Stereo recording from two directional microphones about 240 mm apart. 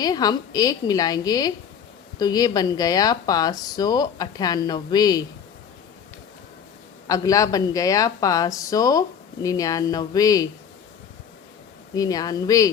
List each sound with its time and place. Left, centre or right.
0.0 s speech: centre
7.1 s speech: centre
11.9 s speech: centre